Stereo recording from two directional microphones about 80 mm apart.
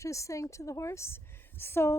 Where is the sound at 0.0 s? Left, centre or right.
Left.